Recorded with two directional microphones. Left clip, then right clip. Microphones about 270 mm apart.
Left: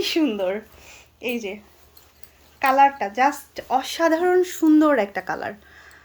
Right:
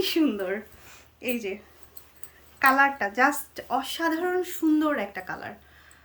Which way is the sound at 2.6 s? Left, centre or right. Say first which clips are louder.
Left 4 dB; centre.